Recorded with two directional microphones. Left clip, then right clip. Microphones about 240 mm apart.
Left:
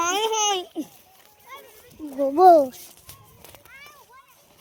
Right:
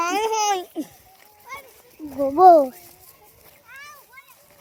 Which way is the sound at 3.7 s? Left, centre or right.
Right.